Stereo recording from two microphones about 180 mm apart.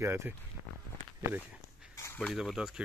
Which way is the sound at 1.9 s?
15° left (ahead or behind).